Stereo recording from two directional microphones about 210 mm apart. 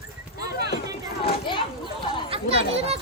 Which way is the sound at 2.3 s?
30° right (ahead or behind).